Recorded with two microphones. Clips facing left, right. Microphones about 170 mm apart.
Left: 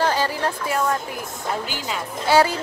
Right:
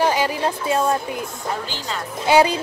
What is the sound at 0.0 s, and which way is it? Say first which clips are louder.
A woman's voice: right 2 dB; 15° right (ahead or behind).